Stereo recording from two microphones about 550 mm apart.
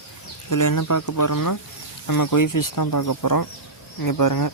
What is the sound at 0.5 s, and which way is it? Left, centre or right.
Speech, left.